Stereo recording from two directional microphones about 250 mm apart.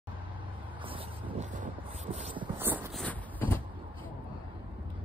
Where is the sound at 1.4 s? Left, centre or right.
Right.